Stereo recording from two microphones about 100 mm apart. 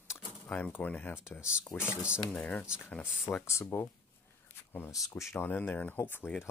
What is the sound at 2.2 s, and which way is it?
Speech, 15° left (ahead or behind).